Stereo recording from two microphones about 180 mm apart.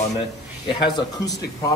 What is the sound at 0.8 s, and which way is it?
Speech, 20° left (ahead or behind).